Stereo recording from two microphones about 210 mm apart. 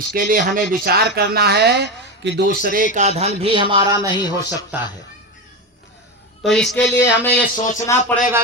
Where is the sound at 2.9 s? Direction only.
35° right (ahead or behind); by 4.1 s 15° right (ahead or behind).